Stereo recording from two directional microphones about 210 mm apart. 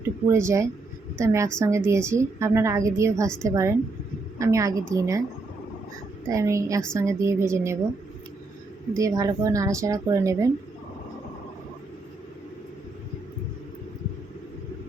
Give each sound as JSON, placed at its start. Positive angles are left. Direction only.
{"t": 0.3, "sound": "a woman's voice", "side_deg": -15}
{"t": 6.2, "sound": "a woman's voice", "side_deg": -15}
{"t": 8.9, "sound": "a woman's voice", "side_deg": -15}